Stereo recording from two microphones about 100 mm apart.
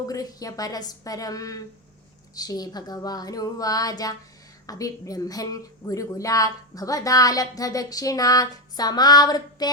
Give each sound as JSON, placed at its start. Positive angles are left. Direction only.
{"t": 0.1, "sound": "a woman's voice", "side_deg": 35}